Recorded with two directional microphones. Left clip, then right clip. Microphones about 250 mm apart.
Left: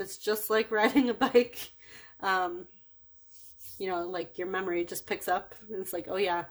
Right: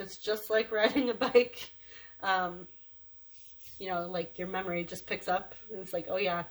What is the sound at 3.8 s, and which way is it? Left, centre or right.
Speech, left.